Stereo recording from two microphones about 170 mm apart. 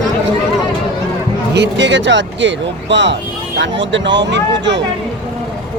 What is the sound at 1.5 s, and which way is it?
Speech, 85° right.